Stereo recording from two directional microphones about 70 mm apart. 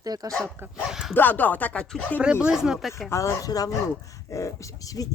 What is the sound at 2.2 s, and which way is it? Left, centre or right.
Speech, centre.